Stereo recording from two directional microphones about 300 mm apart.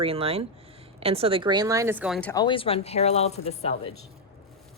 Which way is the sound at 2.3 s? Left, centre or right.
Centre.